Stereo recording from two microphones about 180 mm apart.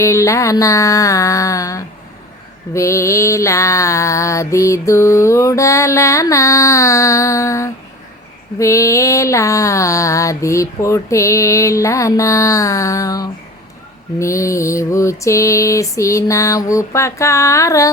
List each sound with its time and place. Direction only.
0.0 s mantra: 15° left (ahead or behind)